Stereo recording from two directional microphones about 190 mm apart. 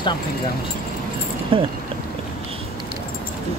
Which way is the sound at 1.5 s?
25° right (ahead or behind).